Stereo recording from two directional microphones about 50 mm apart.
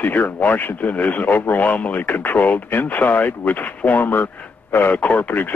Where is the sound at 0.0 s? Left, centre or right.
Left.